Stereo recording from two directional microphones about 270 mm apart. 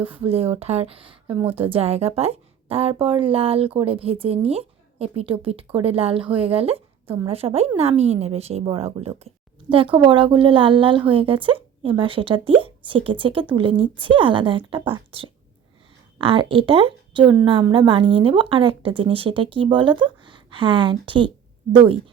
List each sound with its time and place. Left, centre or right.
0.0 s speech: centre